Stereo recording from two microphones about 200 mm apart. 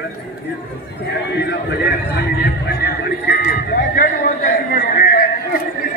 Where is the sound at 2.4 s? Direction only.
55° left (ahead or behind).